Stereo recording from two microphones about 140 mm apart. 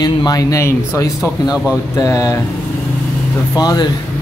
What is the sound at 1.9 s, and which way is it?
Speech, 25° left (ahead or behind).